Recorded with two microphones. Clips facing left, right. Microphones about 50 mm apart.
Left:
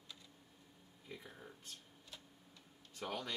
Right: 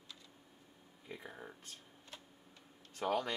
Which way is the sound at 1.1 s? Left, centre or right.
Right.